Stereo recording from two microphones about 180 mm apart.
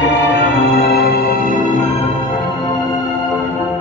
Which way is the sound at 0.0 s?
75° left (ahead or behind).